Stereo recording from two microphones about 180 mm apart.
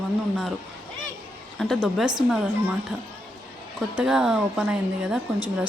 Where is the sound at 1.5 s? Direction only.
Centre (ahead or behind).